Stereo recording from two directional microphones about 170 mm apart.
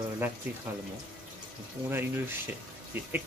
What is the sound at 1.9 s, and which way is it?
Speech, 15° right (ahead or behind).